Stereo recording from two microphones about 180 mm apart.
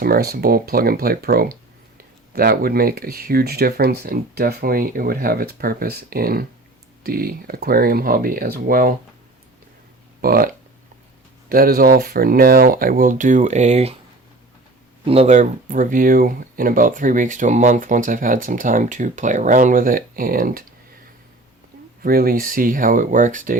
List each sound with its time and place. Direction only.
0.0 s speech: 55° right (ahead or behind)
10.2 s speech: 55° right (ahead or behind); by 13.9 s 35° right (ahead or behind)
15.0 s speech: 35° right (ahead or behind); by 20.7 s 50° right (ahead or behind)
22.0 s speech: 55° right (ahead or behind)